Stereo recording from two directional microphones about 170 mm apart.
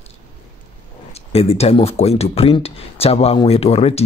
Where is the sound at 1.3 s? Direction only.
35° left (ahead or behind).